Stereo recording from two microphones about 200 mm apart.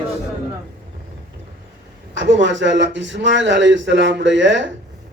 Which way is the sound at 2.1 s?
65° right (ahead or behind).